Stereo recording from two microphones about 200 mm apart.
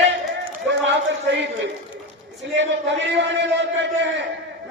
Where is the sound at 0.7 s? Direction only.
60° right (ahead or behind).